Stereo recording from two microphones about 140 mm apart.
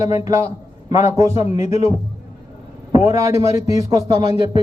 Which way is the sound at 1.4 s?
50° left (ahead or behind).